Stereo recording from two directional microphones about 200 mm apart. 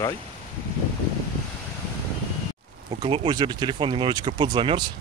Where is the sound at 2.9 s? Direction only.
25° right (ahead or behind).